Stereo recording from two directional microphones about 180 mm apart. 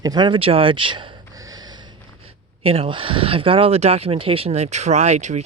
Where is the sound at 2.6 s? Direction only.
30° right (ahead or behind).